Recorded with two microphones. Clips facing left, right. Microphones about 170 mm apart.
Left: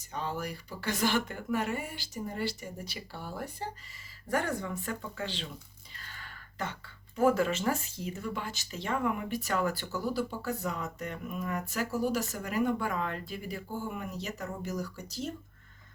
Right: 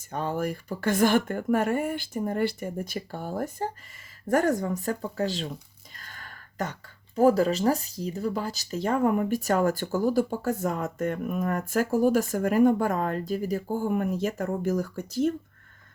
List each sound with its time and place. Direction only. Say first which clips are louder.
0.0 s speech: right 7 dB; 50° right (ahead or behind)